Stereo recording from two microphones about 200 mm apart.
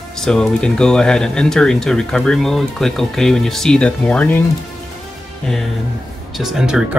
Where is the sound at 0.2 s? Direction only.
Centre (ahead or behind).